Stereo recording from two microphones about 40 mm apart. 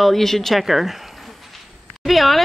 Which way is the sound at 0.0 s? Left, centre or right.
Centre.